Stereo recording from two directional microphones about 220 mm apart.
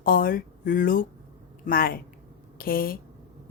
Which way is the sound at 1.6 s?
40° left (ahead or behind).